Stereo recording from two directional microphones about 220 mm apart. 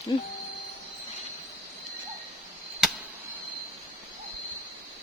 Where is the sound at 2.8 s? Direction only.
Centre (ahead or behind).